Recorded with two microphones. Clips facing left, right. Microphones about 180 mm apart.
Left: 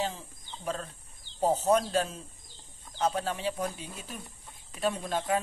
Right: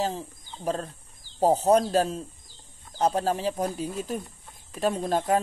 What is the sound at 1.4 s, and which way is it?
A man's voice, 35° right (ahead or behind).